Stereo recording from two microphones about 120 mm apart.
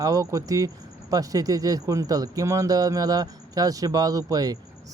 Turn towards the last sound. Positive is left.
turn(degrees=-30)  # may be behind; listen again after turning